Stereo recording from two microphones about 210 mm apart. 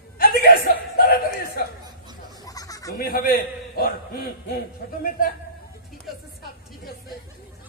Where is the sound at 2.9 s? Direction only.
45° left (ahead or behind).